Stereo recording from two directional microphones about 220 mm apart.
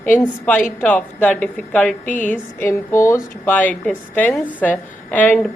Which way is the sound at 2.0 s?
35° left (ahead or behind).